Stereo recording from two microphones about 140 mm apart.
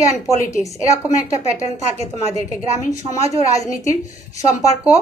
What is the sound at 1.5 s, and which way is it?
Speech, 50° right (ahead or behind).